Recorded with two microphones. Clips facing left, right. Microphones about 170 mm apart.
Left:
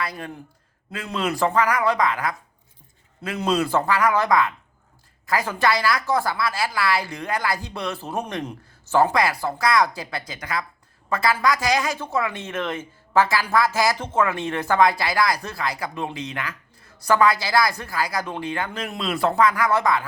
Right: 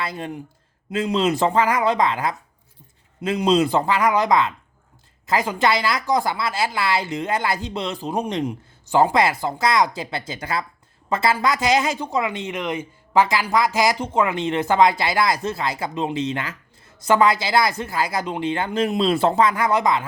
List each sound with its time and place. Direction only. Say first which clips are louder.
0.0 s speech: right 2 dB; 25° right (ahead or behind)
3.5 s speech: right 2 dB; 20° right (ahead or behind)